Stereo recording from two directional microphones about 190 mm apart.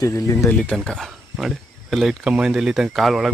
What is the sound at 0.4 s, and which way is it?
Speech, 5° left (ahead or behind).